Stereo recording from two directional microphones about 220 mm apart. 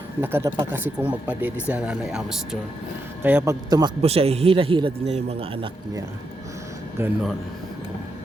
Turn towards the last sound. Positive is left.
turn(degrees=0)  # may be behind; listen again after turning